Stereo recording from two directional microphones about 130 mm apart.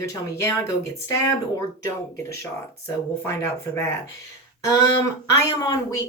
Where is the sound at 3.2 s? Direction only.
20° left (ahead or behind).